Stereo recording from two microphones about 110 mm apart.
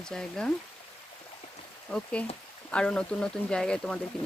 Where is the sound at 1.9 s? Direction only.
10° left (ahead or behind).